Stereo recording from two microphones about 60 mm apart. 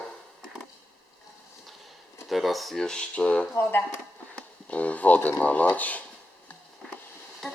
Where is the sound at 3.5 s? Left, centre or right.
Left.